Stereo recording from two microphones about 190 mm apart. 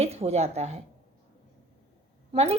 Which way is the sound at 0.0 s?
35° right (ahead or behind).